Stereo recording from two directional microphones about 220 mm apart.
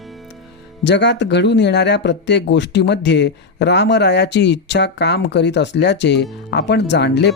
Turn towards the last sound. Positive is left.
turn(degrees=50)  # may be behind; listen again after turning